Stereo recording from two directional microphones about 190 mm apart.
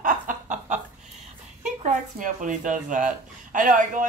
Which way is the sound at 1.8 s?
40° right (ahead or behind).